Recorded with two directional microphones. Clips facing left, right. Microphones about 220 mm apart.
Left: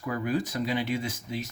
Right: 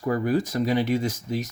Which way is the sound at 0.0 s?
40° right (ahead or behind).